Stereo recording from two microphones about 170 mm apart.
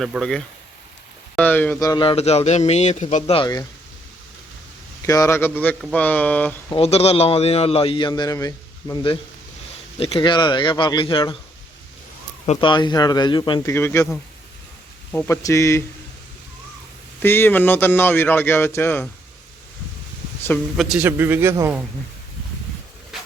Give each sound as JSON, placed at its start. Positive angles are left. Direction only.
{"t": 0.0, "sound": "speech", "side_deg": 0}
{"t": 1.8, "sound": "a man's voice", "side_deg": 25}
{"t": 5.0, "sound": "speech", "side_deg": 20}
{"t": 6.7, "sound": "a man's voice", "side_deg": 35}
{"t": 12.5, "sound": "speech", "side_deg": 30}
{"t": 17.2, "sound": "speech", "side_deg": 15}
{"t": 20.7, "sound": "a man's voice", "side_deg": 0}